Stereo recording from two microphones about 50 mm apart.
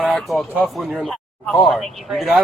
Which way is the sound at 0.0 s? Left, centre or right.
Centre.